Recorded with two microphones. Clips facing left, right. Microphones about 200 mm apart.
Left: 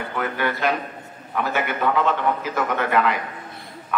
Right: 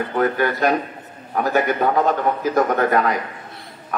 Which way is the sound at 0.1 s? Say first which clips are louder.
Right 5 dB; 40° right (ahead or behind).